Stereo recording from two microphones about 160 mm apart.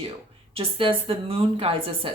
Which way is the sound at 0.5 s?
35° right (ahead or behind).